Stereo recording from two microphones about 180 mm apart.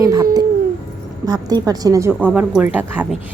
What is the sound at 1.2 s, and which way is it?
A woman's voice, 20° right (ahead or behind).